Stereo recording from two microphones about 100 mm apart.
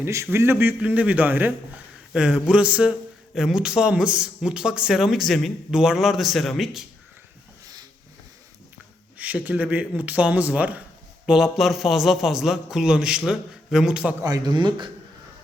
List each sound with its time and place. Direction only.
0.0 s a man's voice: 30° right (ahead or behind); by 6.8 s centre (ahead or behind)
9.1 s speech: 15° right (ahead or behind)
11.5 s a man's voice: centre (ahead or behind)
14.3 s a man's voice: 40° right (ahead or behind)